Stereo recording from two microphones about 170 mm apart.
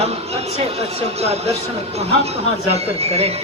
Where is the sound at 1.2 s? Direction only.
40° right (ahead or behind).